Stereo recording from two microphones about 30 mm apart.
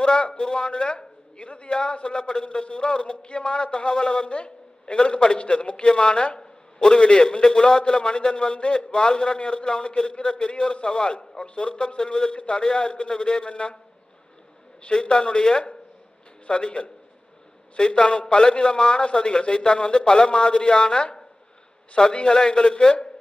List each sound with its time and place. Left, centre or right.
0.0 s a man's voice: left
4.3 s a sound: left
4.9 s a man's voice: left
5.9 s a man's voice: left
11.1 s a man's voice: left
12.0 s a man's voice: left
12.4 s a man's voice: left
14.8 s a man's voice: left